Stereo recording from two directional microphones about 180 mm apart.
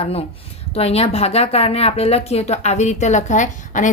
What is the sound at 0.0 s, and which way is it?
Speech, 35° left (ahead or behind).